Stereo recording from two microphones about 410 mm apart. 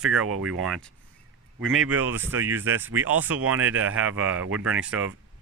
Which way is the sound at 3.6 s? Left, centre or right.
Right.